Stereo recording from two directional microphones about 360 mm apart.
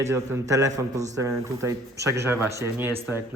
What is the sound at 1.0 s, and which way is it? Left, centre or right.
Speech, centre.